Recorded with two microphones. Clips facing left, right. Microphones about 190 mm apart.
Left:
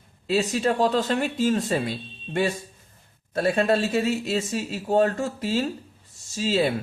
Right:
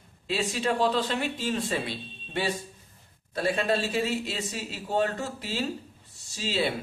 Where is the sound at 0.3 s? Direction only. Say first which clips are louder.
Left 5 dB; 40° left (ahead or behind).